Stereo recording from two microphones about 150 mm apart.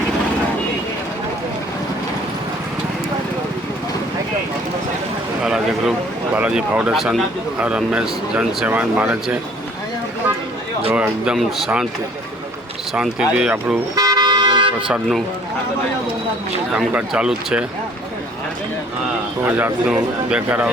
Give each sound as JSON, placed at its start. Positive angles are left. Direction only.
{"t": 5.4, "sound": "a sound", "side_deg": -5}
{"t": 6.3, "sound": "speech", "side_deg": -5}
{"t": 10.9, "sound": "speech", "side_deg": -5}
{"t": 12.9, "sound": "speech", "side_deg": -5}
{"t": 13.9, "sound": "vehicle", "side_deg": -25}
{"t": 14.8, "sound": "speech", "side_deg": -5}
{"t": 16.7, "sound": "speech", "side_deg": -5}
{"t": 19.5, "sound": "speech", "side_deg": -10}